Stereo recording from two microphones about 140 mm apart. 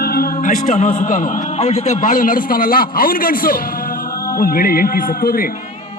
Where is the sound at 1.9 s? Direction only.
70° left (ahead or behind); by 5.6 s 90° left.